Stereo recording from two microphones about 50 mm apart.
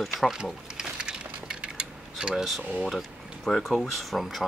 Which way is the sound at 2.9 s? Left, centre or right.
Centre.